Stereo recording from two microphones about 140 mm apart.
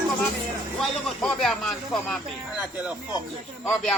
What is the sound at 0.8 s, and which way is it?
Speech, centre (ahead or behind).